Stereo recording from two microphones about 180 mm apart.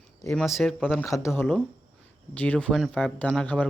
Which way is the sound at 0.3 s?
Centre (ahead or behind).